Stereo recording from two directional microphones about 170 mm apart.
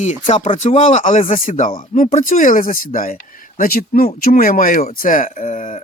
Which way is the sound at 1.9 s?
50° left (ahead or behind).